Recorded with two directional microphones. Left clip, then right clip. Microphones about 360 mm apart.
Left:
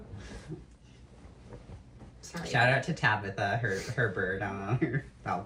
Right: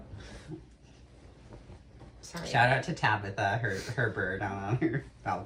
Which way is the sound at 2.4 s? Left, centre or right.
Centre.